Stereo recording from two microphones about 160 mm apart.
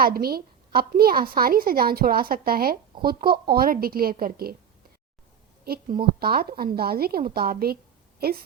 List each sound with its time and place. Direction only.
0.0 s a woman's voice: 70° right (ahead or behind)
6.0 s a woman's voice: 70° right (ahead or behind)